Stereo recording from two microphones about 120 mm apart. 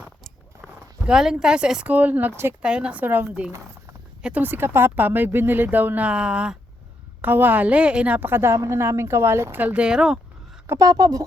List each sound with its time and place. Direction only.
0.3 s speech: centre (ahead or behind); by 2.6 s 20° right (ahead or behind)
2.6 s a woman's voice: 10° right (ahead or behind)
10.7 s speech: 30° right (ahead or behind)